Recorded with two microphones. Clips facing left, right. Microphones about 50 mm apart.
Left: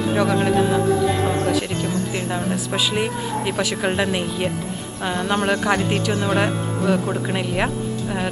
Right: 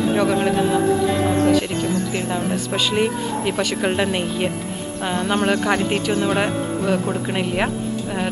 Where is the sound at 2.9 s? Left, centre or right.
Centre.